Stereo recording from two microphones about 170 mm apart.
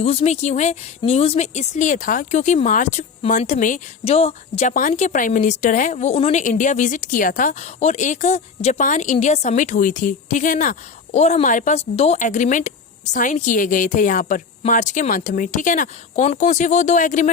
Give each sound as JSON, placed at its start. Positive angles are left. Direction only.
{"t": 0.0, "sound": "speech", "side_deg": 35}
{"t": 6.4, "sound": "speech", "side_deg": 50}